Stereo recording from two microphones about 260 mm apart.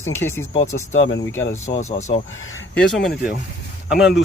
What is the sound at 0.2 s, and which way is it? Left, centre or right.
Speech, centre.